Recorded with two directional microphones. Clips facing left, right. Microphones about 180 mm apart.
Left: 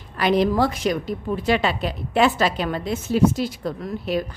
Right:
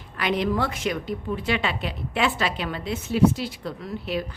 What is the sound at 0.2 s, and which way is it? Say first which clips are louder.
A woman's voice: left 5 dB; 40° left (ahead or behind).